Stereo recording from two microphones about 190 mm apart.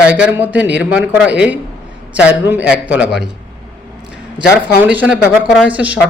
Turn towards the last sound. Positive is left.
turn(degrees=-5)  # may be behind; listen again after turning